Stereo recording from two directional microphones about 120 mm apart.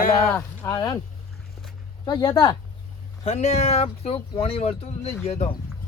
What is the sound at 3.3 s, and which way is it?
Speech, 65° left (ahead or behind).